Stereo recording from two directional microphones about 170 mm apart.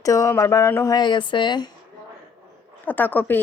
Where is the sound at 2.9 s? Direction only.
10° left (ahead or behind).